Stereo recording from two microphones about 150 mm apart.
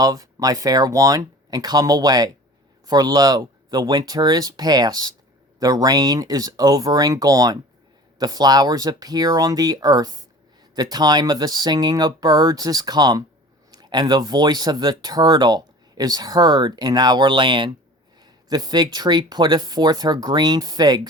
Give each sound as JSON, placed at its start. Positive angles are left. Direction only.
{"t": 0.0, "sound": "speech", "side_deg": -25}